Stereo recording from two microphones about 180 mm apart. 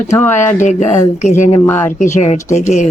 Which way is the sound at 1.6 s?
15° left (ahead or behind).